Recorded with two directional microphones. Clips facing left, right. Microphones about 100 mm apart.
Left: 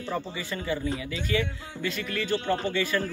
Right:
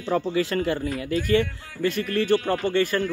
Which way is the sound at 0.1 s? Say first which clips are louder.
Right 10 dB; 90° right.